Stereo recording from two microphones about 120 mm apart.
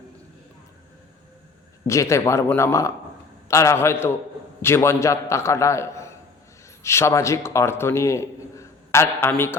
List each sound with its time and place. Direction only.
1.9 s a man's voice: 25° left (ahead or behind)